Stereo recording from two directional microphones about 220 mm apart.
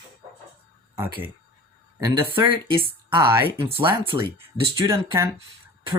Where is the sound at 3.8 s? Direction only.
25° right (ahead or behind).